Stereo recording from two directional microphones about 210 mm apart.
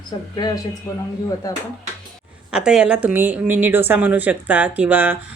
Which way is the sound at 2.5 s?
5° right (ahead or behind).